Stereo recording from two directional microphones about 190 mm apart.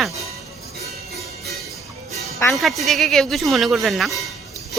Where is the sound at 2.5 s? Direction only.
Centre (ahead or behind).